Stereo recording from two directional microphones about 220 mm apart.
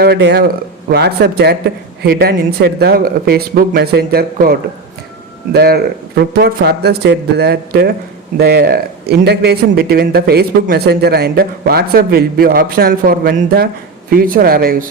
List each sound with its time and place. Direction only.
0.0 s speech: 50° right (ahead or behind)